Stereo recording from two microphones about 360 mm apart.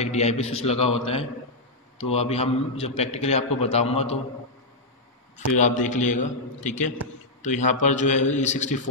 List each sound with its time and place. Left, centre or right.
0.0 s a man's voice: centre
2.0 s a man's voice: centre
5.6 s a man's voice: centre